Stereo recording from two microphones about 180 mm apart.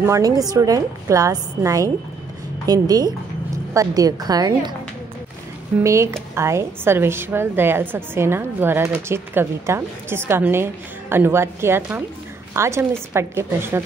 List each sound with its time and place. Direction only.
0.0 s a woman's voice: 20° right (ahead or behind)
5.8 s speech: 15° right (ahead or behind)